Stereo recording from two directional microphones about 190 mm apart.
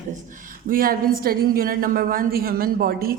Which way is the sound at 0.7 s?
50° right (ahead or behind).